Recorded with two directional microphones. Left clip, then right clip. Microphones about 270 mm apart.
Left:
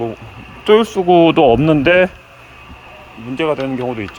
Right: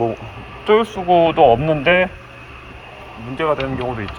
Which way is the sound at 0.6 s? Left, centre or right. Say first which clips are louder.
Left 3 dB; left.